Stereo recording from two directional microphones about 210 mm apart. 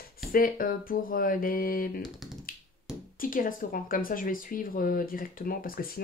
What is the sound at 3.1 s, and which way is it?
Speech, 40° left (ahead or behind).